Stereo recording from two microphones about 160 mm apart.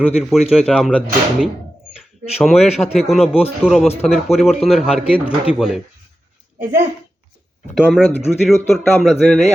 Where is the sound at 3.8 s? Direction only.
40° left (ahead or behind).